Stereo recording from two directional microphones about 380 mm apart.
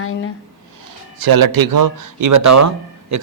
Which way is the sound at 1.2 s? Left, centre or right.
Right.